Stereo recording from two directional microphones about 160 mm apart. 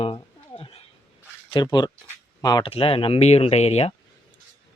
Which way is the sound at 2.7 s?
35° left (ahead or behind).